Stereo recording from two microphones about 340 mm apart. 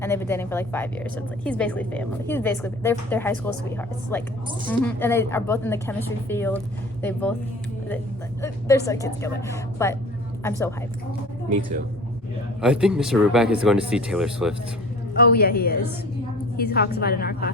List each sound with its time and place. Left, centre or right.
0.0 s a woman's voice: centre
8.4 s speech: centre
12.6 s a woman's voice: centre
15.2 s a woman's voice: left